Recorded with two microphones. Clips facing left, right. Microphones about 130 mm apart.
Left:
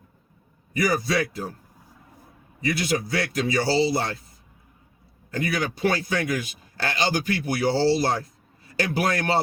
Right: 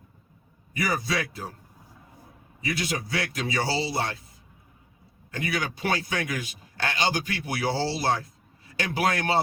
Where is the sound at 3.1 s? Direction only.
35° left (ahead or behind).